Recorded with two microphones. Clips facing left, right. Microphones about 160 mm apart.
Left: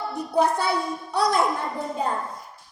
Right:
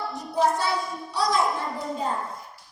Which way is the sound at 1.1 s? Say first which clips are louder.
Left 2 dB; 60° left (ahead or behind).